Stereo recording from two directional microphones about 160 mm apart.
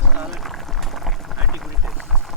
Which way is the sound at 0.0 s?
5° right (ahead or behind).